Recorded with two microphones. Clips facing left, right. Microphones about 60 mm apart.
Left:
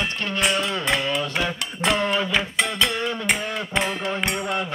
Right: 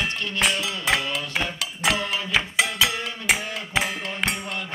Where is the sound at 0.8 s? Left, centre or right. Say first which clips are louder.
Right 2 dB; centre.